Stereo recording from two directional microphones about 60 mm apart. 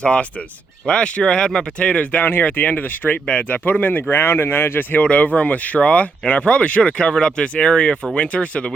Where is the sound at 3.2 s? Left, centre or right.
Centre.